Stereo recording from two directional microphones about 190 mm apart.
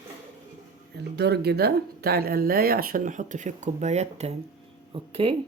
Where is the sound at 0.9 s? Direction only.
60° right (ahead or behind); by 5.4 s 30° right (ahead or behind).